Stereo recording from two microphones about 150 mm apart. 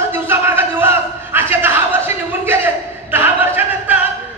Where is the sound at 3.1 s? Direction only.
15° right (ahead or behind).